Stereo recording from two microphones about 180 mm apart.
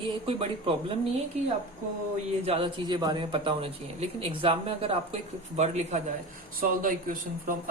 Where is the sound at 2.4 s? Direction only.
30° right (ahead or behind).